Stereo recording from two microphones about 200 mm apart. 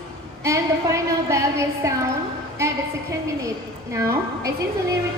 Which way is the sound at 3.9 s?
15° right (ahead or behind).